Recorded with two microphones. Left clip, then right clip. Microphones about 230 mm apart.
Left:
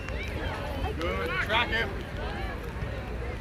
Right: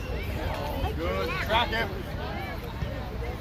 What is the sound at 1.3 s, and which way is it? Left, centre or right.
Speech, right.